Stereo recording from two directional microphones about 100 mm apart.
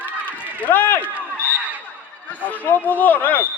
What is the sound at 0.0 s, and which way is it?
Run, 15° left (ahead or behind).